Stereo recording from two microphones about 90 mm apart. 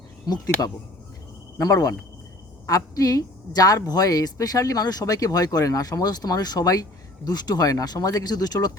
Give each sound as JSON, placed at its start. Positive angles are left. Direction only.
{"t": 0.3, "sound": "a woman's voice", "side_deg": 45}